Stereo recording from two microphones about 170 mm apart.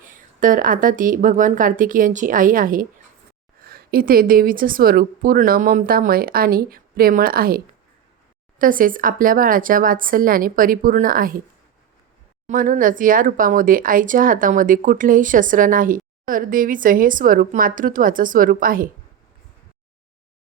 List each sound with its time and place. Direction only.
0.0 s a woman's voice: 50° right (ahead or behind)
12.5 s speech: 50° right (ahead or behind)